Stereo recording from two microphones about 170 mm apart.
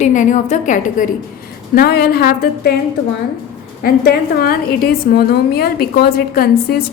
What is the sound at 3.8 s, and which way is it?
A woman's voice, 60° left (ahead or behind).